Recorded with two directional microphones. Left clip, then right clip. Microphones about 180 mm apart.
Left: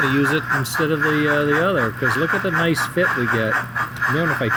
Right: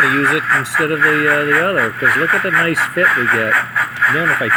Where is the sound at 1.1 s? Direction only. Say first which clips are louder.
Right 5 dB; 10° right (ahead or behind).